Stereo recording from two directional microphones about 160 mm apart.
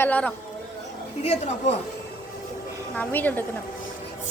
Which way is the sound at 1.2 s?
40° left (ahead or behind).